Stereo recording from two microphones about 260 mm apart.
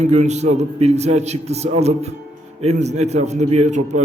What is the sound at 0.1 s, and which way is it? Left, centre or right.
A man's voice, right.